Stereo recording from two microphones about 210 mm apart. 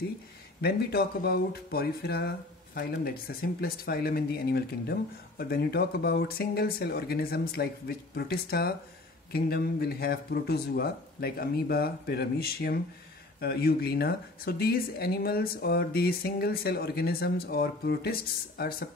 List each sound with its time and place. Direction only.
0.6 s speech: 50° left (ahead or behind)